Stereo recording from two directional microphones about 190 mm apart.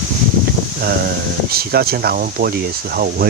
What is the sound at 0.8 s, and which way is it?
Speech, 55° right (ahead or behind).